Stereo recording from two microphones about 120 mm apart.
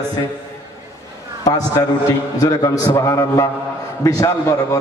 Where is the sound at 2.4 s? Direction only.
30° left (ahead or behind).